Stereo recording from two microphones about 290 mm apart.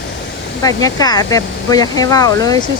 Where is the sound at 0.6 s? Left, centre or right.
Centre.